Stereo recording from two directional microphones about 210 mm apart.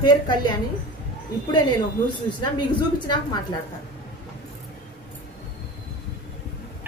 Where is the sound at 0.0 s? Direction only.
20° left (ahead or behind).